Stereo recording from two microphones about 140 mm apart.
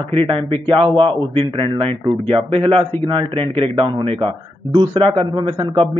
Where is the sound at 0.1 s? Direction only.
40° right (ahead or behind).